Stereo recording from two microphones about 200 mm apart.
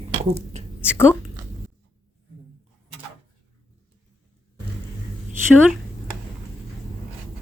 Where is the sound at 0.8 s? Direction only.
10° left (ahead or behind).